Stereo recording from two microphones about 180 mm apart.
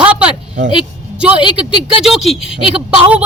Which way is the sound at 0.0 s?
5° right (ahead or behind).